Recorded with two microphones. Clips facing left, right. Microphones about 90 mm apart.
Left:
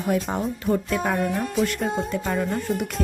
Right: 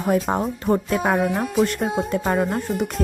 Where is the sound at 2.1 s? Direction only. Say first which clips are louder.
Right 4 dB; 50° right (ahead or behind).